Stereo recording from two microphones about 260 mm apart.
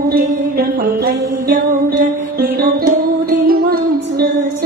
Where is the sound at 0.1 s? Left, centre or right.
Right.